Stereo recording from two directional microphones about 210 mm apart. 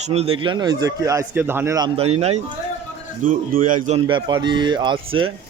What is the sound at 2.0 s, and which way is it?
Speech, 30° right (ahead or behind).